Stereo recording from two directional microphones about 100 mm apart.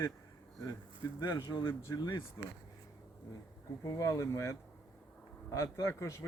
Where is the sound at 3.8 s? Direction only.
35° left (ahead or behind).